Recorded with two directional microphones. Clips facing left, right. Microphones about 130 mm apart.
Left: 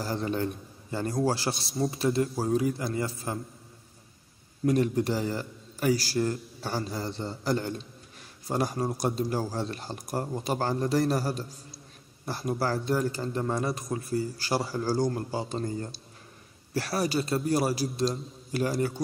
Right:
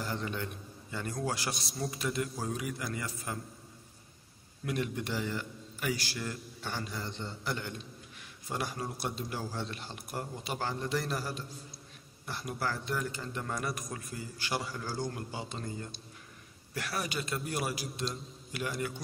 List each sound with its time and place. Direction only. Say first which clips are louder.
0.0 s a man's voice: left 7 dB; 35° left (ahead or behind)
4.6 s speech: left 10 dB; 40° left (ahead or behind)